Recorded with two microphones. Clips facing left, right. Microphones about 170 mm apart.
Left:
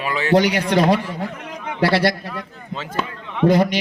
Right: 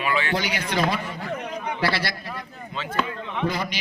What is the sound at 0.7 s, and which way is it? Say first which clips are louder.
A man's voice: left 8 dB; 70° left (ahead or behind).